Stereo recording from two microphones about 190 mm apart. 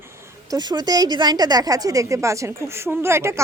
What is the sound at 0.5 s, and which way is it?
A woman's voice, 20° right (ahead or behind).